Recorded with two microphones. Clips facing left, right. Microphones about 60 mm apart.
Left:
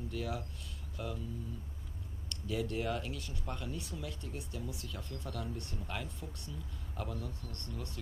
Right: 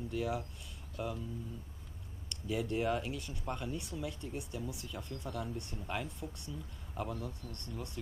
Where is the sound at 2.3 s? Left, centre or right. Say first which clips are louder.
Right 1 dB; right.